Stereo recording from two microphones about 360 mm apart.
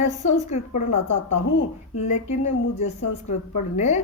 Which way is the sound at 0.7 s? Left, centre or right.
Left.